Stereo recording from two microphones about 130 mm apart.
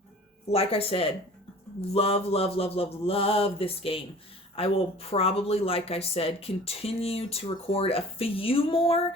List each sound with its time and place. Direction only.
0.4 s speech: 50° left (ahead or behind)